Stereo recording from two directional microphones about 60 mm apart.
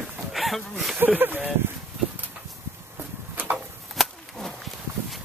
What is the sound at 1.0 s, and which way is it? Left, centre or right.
Speech, right.